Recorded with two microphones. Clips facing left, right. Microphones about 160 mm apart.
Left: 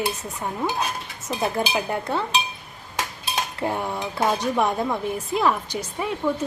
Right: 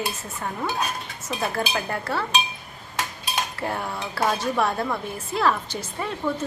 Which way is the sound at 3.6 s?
20° left (ahead or behind).